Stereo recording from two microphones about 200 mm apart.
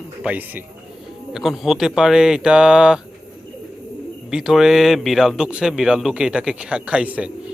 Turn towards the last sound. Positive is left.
turn(degrees=-5)  # may be behind; listen again after turning